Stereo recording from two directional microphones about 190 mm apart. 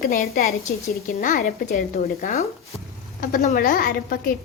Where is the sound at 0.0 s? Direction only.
50° left (ahead or behind).